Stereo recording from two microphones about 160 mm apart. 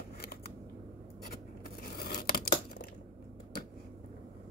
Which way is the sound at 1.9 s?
70° left (ahead or behind).